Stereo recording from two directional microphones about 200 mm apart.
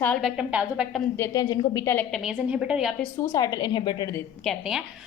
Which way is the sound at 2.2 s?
5° right (ahead or behind).